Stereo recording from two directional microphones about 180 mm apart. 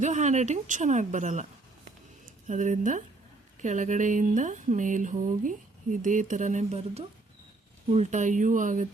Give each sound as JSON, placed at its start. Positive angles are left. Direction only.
{"t": 0.0, "sound": "speech", "side_deg": -40}